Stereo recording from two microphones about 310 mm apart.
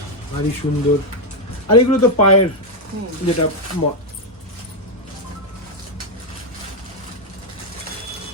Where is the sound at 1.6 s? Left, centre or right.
Left.